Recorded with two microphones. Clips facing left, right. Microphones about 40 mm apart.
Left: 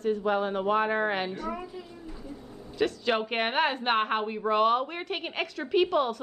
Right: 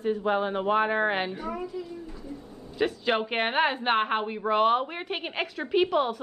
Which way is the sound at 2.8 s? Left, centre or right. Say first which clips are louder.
Right 1 dB; centre.